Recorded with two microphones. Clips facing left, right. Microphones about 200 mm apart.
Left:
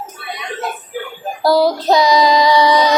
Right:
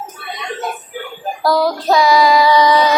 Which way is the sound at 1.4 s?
25° left (ahead or behind).